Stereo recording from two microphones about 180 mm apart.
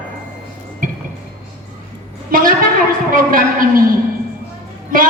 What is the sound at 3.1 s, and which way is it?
Speech, 50° right (ahead or behind).